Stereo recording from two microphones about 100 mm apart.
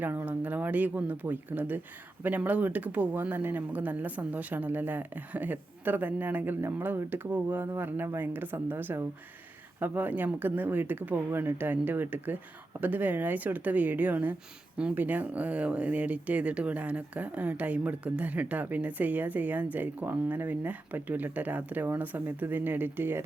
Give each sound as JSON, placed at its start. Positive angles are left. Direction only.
{"t": 0.0, "sound": "speech", "side_deg": -20}